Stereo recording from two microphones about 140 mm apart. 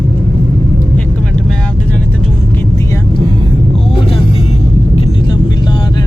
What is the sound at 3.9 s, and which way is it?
Vehicle, 40° left (ahead or behind).